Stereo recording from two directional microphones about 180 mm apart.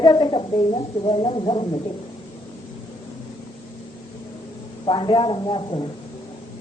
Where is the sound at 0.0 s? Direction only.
25° left (ahead or behind).